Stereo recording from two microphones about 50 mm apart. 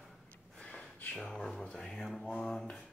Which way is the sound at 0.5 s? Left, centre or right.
Left.